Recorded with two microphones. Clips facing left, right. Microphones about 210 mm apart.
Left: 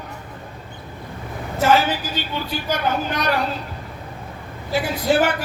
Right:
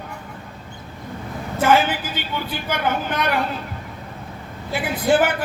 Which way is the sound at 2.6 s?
55° right (ahead or behind).